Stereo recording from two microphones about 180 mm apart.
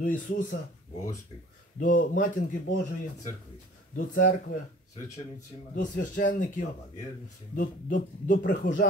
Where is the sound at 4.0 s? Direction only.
50° left (ahead or behind).